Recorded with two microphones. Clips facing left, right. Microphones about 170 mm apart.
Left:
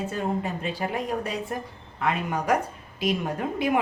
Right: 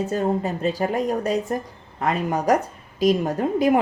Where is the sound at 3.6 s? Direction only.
40° right (ahead or behind).